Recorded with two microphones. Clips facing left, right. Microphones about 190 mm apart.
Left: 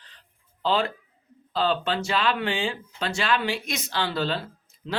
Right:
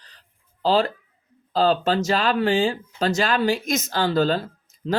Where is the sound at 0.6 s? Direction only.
40° right (ahead or behind).